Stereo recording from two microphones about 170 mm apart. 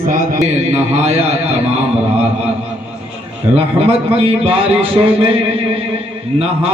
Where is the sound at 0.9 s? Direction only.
40° right (ahead or behind).